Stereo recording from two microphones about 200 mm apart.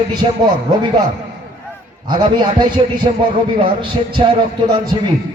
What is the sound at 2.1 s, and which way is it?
A man's voice, 20° right (ahead or behind).